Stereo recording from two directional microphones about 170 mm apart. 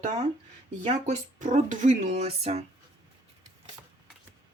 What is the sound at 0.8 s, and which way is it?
Speech, 45° right (ahead or behind).